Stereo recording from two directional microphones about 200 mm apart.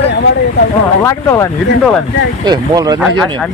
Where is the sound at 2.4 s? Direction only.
20° right (ahead or behind).